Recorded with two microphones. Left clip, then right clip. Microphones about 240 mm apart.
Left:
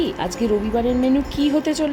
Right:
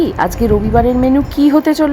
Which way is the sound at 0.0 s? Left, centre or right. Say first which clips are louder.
Right 8 dB; centre.